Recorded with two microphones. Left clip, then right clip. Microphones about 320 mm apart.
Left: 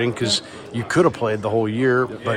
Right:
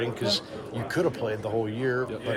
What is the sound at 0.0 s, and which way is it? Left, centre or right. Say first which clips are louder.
A man's voice: left 6 dB; left.